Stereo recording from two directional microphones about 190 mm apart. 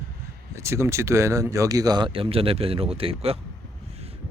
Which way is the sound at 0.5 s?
15° right (ahead or behind).